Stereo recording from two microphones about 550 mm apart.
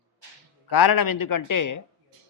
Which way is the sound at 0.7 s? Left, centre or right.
Left.